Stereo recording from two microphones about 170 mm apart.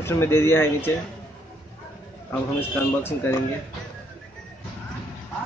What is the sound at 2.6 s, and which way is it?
Speech, 15° left (ahead or behind).